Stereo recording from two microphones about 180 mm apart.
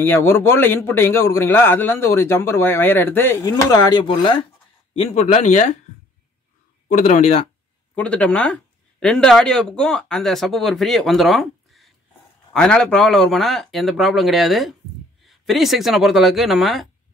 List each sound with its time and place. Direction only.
0.0 s a man's voice: 15° left (ahead or behind); by 5.8 s 40° left (ahead or behind)
6.9 s speech: 45° left (ahead or behind)
7.9 s a man's voice: 5° left (ahead or behind)